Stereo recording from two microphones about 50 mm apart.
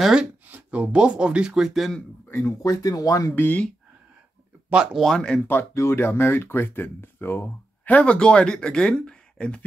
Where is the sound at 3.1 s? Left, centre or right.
Left.